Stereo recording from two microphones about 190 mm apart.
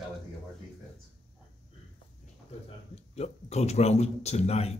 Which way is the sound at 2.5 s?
30° left (ahead or behind).